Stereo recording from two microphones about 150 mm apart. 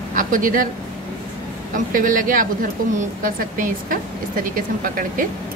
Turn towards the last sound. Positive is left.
turn(degrees=-65)  # may be behind; listen again after turning